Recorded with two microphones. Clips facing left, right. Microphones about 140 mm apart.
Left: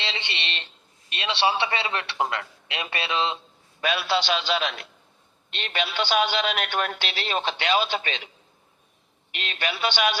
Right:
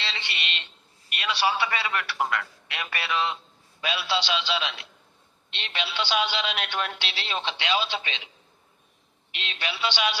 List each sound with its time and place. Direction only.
0.0 s a man's voice: 20° left (ahead or behind)
3.8 s speech: 50° left (ahead or behind)
9.3 s speech: 50° left (ahead or behind)